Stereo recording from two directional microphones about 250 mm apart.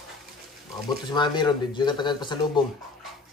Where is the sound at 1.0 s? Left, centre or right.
Centre.